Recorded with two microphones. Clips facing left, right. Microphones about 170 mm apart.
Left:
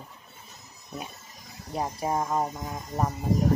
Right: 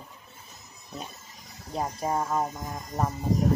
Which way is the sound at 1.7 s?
5° left (ahead or behind).